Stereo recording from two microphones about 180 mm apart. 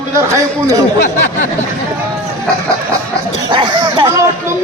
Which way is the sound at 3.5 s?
25° right (ahead or behind).